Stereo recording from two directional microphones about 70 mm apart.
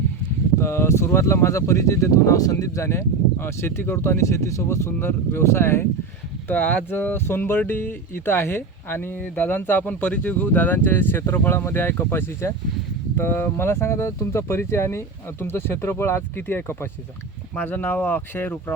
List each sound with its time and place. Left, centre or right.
0.6 s speech: left
4.9 s speech: left
6.5 s speech: left